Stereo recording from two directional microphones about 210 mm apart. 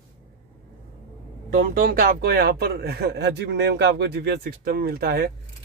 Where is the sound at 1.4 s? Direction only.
40° right (ahead or behind).